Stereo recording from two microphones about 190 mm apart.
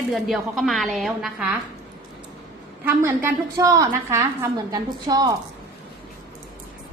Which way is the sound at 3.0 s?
15° right (ahead or behind).